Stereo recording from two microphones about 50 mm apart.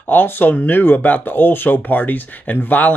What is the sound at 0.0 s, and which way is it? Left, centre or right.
Speech, left.